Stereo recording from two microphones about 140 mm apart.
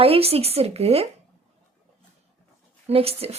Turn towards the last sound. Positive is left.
turn(degrees=-45)  # may be behind; listen again after turning